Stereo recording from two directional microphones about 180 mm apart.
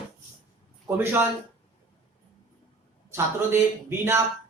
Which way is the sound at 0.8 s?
10° right (ahead or behind).